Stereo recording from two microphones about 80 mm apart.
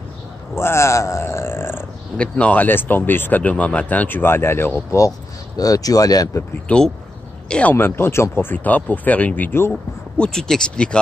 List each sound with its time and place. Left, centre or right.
0.6 s grunt: left
2.1 s speech: centre
5.6 s speech: left
6.7 s a man's voice: centre
7.7 s speech: left; by 11.0 s centre